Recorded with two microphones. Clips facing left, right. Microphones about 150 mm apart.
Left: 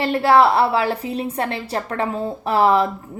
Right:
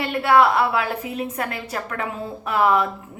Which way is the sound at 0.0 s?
35° left (ahead or behind).